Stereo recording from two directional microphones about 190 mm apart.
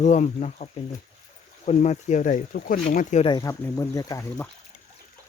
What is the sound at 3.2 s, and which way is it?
Speech, 20° left (ahead or behind).